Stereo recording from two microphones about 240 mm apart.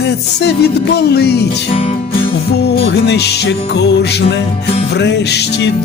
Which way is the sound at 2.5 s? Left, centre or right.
Left.